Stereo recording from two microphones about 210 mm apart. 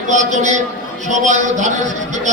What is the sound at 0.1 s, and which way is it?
A man's voice, 35° right (ahead or behind).